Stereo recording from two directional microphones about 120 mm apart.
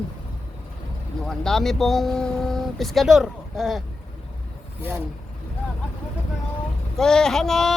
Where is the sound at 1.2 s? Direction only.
5° left (ahead or behind).